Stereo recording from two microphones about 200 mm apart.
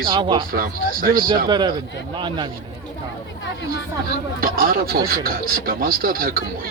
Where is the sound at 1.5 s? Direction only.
20° right (ahead or behind).